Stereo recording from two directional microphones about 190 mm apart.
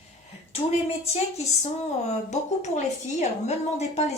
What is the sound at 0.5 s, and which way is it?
A woman's voice, 35° left (ahead or behind).